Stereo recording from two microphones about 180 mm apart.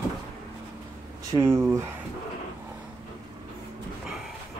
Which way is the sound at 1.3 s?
15° right (ahead or behind).